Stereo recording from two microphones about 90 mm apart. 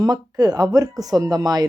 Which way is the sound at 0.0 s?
45° right (ahead or behind).